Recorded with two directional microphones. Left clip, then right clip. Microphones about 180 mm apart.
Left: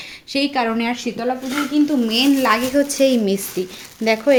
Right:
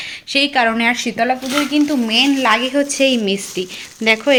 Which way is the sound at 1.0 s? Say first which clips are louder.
Right 5 dB; 40° right (ahead or behind).